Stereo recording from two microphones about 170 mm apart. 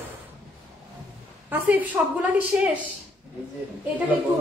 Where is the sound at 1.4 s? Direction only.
10° right (ahead or behind).